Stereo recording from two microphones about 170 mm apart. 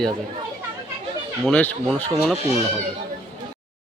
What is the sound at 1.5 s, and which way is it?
Speech, 5° left (ahead or behind).